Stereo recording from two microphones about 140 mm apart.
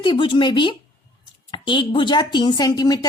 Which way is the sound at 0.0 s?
35° left (ahead or behind).